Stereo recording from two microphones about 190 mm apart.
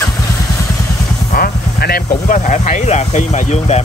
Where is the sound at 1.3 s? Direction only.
55° left (ahead or behind).